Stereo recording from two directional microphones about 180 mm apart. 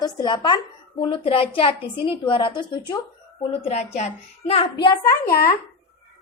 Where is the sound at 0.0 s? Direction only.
25° left (ahead or behind).